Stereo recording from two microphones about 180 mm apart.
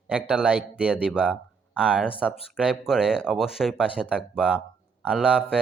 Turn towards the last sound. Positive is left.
turn(degrees=-5)  # may be behind; listen again after turning